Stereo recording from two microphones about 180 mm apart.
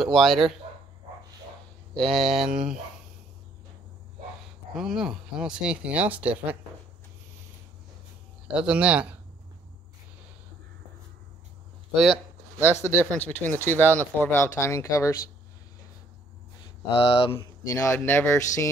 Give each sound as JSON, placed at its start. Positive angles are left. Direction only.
{"t": 0.0, "sound": "speech", "side_deg": 0}
{"t": 2.0, "sound": "speech", "side_deg": 0}
{"t": 4.7, "sound": "speech", "side_deg": 0}
{"t": 8.5, "sound": "speech", "side_deg": -5}
{"t": 11.9, "sound": "speech", "side_deg": 0}
{"t": 13.2, "sound": "speech", "side_deg": 10}
{"t": 16.9, "sound": "speech", "side_deg": 30}
{"t": 17.6, "sound": "speech", "side_deg": 15}